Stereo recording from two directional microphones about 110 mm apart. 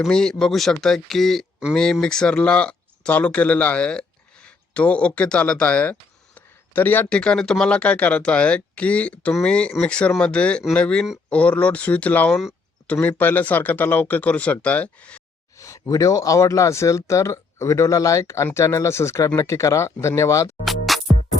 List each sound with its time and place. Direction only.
0.0 s speech: 5° left (ahead or behind)
15.5 s speech: 30° left (ahead or behind)
20.7 s music: centre (ahead or behind)